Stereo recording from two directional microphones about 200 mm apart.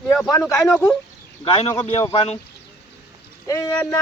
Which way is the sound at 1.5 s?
25° left (ahead or behind).